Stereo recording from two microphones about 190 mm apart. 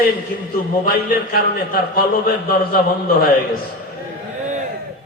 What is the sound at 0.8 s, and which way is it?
A man's voice, 50° left (ahead or behind).